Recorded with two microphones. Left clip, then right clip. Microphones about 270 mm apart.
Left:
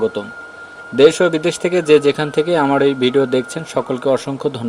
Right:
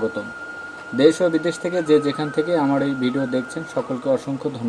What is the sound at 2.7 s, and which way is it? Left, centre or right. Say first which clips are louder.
Speech: left 7 dB; left.